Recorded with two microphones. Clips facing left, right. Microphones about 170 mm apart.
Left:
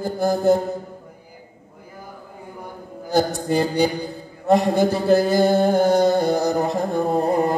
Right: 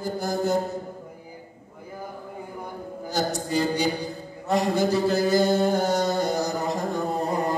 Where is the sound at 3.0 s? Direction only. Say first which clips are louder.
Left 7 dB; 55° left (ahead or behind).